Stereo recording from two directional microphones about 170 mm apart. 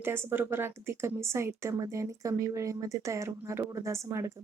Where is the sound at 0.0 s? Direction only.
15° right (ahead or behind).